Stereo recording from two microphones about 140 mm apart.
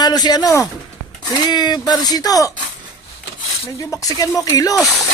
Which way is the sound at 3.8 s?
25° left (ahead or behind).